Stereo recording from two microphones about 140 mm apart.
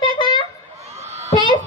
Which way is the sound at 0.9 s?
50° right (ahead or behind).